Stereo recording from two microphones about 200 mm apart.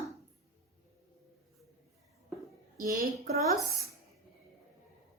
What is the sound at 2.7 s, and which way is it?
Speech, 45° right (ahead or behind).